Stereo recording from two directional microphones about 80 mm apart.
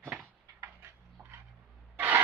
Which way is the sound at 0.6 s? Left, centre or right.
Right.